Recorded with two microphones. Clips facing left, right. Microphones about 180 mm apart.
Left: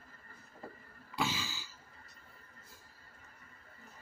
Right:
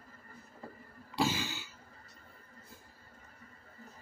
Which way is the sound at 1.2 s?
60° right (ahead or behind).